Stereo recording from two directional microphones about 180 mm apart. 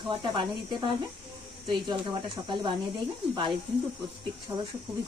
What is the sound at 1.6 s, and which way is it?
Speech, 25° right (ahead or behind).